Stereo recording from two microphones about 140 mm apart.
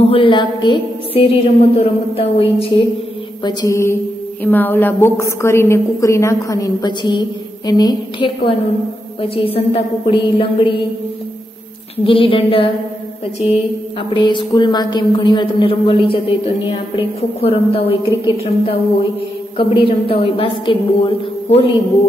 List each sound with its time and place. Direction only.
0.0 s a woman's voice: 40° left (ahead or behind)
1.8 s a sound: 45° left (ahead or behind)
3.4 s a woman's voice: 20° left (ahead or behind); by 10.8 s 40° left (ahead or behind)
12.0 s a woman's voice: 40° left (ahead or behind)
13.4 s a woman's voice: 5° right (ahead or behind)
14.1 s a woman's voice: 35° left (ahead or behind)